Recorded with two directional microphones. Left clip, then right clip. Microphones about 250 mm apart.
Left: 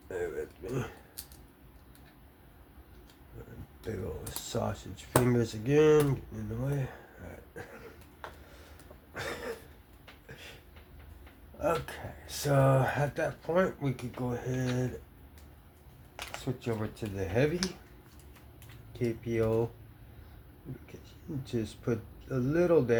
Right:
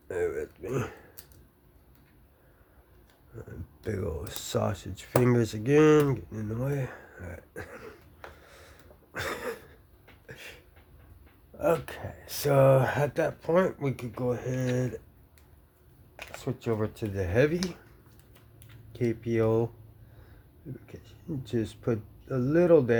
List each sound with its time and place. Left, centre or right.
0.1 s throat clearing: right
3.8 s speech: right
9.1 s a sound: right
11.6 s speech: right
16.4 s speech: right
18.9 s speech: right
21.4 s speech: right